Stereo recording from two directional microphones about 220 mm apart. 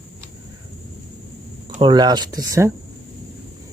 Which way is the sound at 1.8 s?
20° right (ahead or behind).